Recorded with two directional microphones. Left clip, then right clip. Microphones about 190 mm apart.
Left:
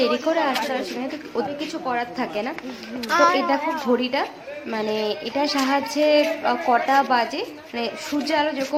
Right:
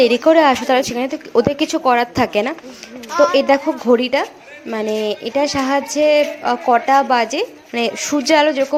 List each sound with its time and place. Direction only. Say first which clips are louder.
0.0 s speech: right 9 dB; 40° right (ahead or behind)
3.1 s a woman's voice: right 3 dB; 35° left (ahead or behind)
3.3 s a woman's voice: right 7 dB; 40° right (ahead or behind)